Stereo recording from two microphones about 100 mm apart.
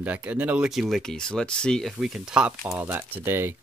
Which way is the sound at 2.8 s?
20° right (ahead or behind).